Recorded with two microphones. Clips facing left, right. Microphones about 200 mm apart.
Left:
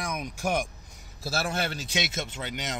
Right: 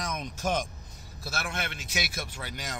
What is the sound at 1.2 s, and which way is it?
Speech, 35° left (ahead or behind).